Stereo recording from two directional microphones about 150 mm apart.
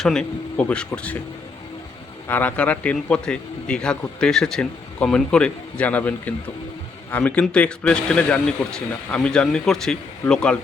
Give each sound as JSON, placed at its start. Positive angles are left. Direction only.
{"t": 0.0, "sound": "speech", "side_deg": 5}
{"t": 2.2, "sound": "a man's voice", "side_deg": 10}